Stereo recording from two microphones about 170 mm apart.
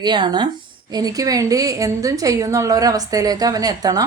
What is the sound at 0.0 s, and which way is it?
A woman's voice, 25° right (ahead or behind).